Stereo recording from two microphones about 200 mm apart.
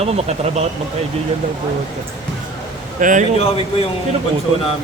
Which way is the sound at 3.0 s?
40° right (ahead or behind).